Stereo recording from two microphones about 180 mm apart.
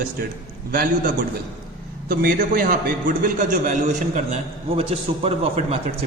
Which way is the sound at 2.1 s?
50° right (ahead or behind).